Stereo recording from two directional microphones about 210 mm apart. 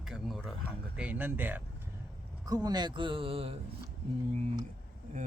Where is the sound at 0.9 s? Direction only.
5° right (ahead or behind).